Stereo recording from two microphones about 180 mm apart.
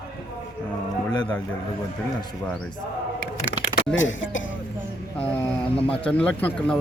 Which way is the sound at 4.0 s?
90° left.